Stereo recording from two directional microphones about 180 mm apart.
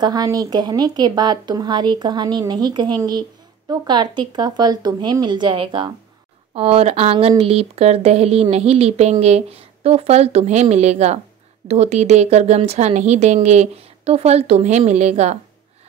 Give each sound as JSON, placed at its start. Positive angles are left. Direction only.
{"t": 0.0, "sound": "a woman's voice", "side_deg": -20}